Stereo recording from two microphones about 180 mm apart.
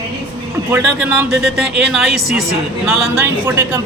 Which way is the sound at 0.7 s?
5° right (ahead or behind).